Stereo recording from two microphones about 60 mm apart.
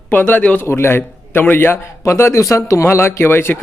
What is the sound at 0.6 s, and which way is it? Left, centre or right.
A man's voice, left.